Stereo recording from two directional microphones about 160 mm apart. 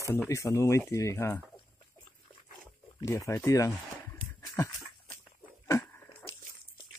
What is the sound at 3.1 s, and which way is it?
Speech, 20° left (ahead or behind).